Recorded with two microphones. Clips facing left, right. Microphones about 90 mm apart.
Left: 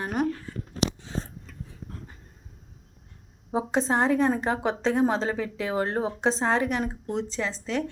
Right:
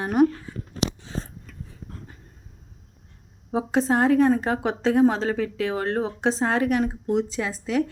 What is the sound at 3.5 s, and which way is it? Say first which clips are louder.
Speech: right 3 dB; centre (ahead or behind).